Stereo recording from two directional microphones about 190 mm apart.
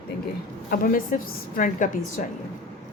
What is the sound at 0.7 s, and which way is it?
A woman's voice, 45° left (ahead or behind).